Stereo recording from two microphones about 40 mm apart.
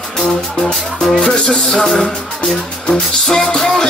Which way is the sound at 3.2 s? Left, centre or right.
Centre.